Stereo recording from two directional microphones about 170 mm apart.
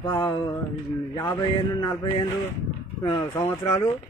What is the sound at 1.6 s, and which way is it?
Speech, 30° left (ahead or behind).